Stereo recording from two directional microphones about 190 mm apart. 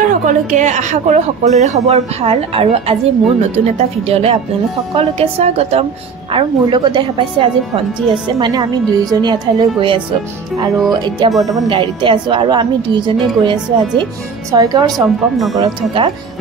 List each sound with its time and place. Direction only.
0.2 s a woman's voice: 40° right (ahead or behind); by 14.9 s 20° right (ahead or behind)
14.9 s speech: centre (ahead or behind)
15.5 s speech: 20° right (ahead or behind)